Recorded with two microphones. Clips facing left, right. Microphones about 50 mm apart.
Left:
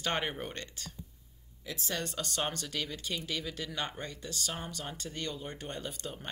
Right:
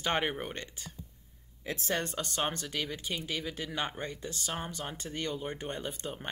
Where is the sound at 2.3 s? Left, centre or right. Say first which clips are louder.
Right 2 dB; centre.